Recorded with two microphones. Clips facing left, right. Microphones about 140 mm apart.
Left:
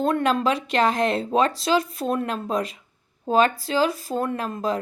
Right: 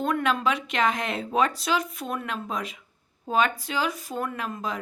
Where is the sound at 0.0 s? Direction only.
35° left (ahead or behind).